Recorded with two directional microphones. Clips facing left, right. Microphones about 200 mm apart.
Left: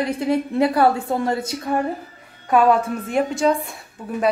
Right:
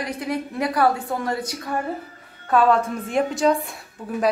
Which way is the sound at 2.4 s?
10° left (ahead or behind).